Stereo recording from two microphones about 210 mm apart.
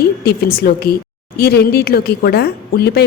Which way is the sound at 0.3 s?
45° left (ahead or behind).